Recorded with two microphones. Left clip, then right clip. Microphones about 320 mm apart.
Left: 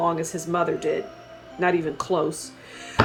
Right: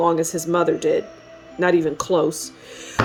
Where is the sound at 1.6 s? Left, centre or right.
Right.